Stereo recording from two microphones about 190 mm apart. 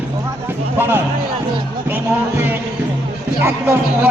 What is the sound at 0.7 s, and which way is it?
Speech, 10° right (ahead or behind).